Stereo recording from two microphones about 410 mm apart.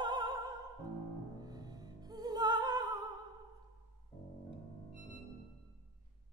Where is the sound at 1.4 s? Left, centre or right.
Centre.